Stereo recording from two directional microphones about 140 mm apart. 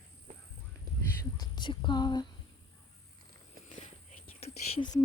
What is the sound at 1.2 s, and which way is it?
Speech, 30° left (ahead or behind).